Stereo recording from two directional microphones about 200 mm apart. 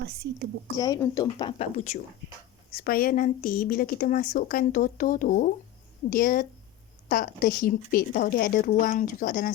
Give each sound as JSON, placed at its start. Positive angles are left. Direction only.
{"t": 0.8, "sound": "speech", "side_deg": 15}
{"t": 2.7, "sound": "speech", "side_deg": 50}